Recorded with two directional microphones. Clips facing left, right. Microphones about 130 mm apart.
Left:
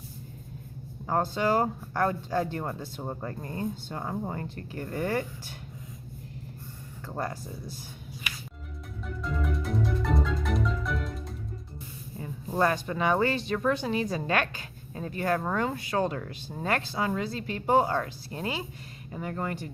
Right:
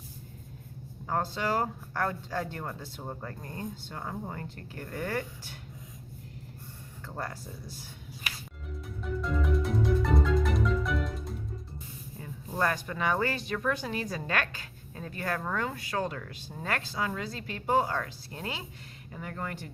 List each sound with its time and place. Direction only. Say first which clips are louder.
1.0 s speech: left 4 dB; 25° left (ahead or behind)
7.1 s speech: left 4 dB; 20° left (ahead or behind)
9.0 s marimba: right 2 dB; centre (ahead or behind)
12.2 s speech: left 4 dB; 20° left (ahead or behind)